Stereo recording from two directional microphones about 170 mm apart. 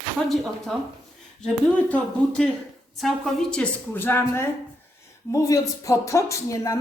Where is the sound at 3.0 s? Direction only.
Centre (ahead or behind).